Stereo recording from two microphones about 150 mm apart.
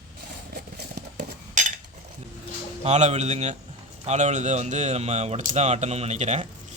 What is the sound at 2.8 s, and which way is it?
Speech, 45° right (ahead or behind).